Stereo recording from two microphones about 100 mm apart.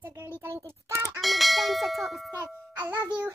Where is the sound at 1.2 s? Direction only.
Centre (ahead or behind).